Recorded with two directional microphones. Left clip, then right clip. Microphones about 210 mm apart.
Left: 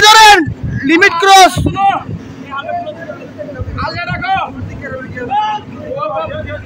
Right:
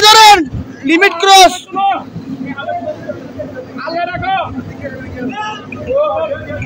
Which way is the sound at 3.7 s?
40° left (ahead or behind).